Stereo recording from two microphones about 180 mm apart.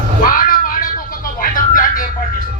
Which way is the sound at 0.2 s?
50° left (ahead or behind).